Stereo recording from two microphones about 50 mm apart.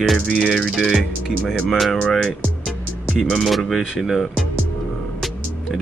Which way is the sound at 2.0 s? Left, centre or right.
Left.